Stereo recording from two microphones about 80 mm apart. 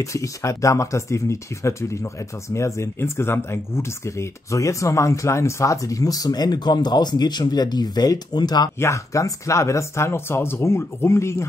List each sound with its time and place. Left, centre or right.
0.0 s speech: left
8.7 s speech: left